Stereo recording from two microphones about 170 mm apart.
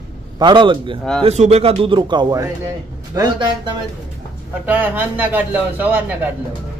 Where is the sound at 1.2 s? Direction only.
40° right (ahead or behind).